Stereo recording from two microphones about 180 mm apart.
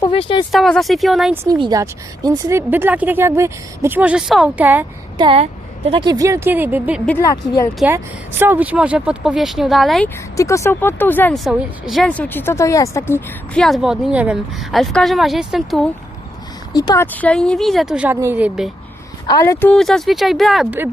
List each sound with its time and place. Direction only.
0.1 s speech: 30° left (ahead or behind)
0.5 s speech: centre (ahead or behind)
1.5 s speech: 25° right (ahead or behind)
5.1 s a woman's voice: 30° right (ahead or behind); by 7.0 s 10° right (ahead or behind)
7.2 s speech: 20° left (ahead or behind)
7.9 s speech: 10° right (ahead or behind)
10.3 s speech: 15° left (ahead or behind)
11.3 s speech: centre (ahead or behind)
16.7 s speech: 20° left (ahead or behind); by 18.7 s 5° right (ahead or behind)
19.3 s speech: 15° left (ahead or behind); by 20.7 s centre (ahead or behind)